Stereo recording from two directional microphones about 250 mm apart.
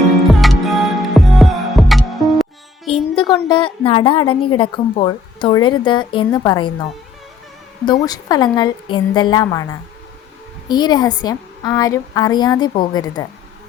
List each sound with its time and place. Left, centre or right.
0.3 s music: centre
2.9 s a woman's voice: centre
8.0 s a woman's voice: centre
10.7 s a woman's voice: centre